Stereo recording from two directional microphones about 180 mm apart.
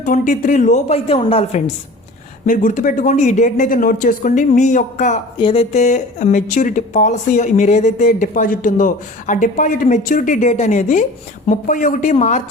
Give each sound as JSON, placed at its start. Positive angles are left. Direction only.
{"t": 0.0, "sound": "speech", "side_deg": 45}
{"t": 5.4, "sound": "speech", "side_deg": 30}